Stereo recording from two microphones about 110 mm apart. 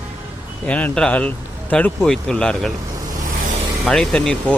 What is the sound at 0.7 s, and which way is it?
Speech, 10° left (ahead or behind).